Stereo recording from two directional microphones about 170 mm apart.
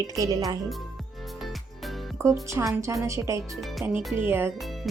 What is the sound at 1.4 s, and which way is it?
Music, centre (ahead or behind).